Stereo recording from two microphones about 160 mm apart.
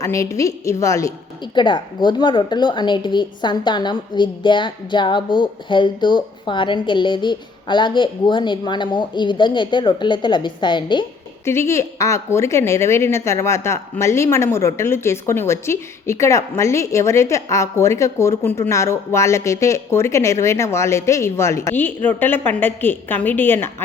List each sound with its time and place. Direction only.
0.0 s a woman's voice: 20° left (ahead or behind)
1.5 s a woman's voice: 30° left (ahead or behind)
11.4 s a woman's voice: 15° left (ahead or behind)